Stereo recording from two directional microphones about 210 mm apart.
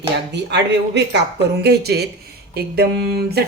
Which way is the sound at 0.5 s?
55° right (ahead or behind).